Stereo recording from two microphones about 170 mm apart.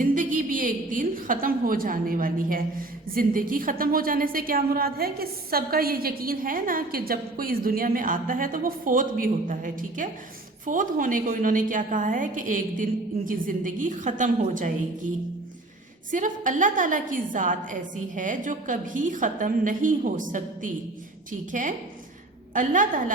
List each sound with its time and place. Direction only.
0.0 s a sound: 50° right (ahead or behind)
3.2 s a woman's voice: 55° right (ahead or behind)
16.1 s a woman's voice: 50° right (ahead or behind)